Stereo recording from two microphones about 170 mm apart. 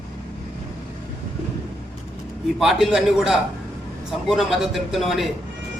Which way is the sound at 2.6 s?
Centre (ahead or behind).